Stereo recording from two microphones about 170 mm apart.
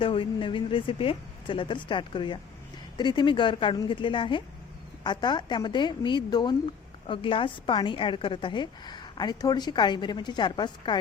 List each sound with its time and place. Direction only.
0.0 s a woman's voice: 30° left (ahead or behind)